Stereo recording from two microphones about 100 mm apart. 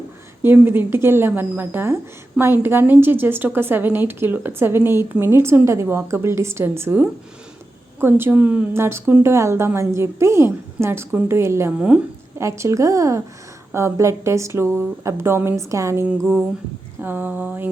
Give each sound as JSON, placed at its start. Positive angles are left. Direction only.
{"t": 0.4, "sound": "a woman's voice", "side_deg": -20}
{"t": 17.0, "sound": "a woman's voice", "side_deg": -20}